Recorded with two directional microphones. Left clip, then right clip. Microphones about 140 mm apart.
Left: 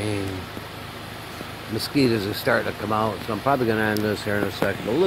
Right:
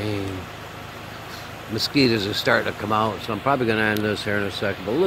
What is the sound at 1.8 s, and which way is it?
Speech, 5° right (ahead or behind).